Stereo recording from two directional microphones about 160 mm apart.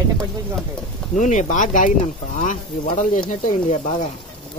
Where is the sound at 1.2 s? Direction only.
50° left (ahead or behind).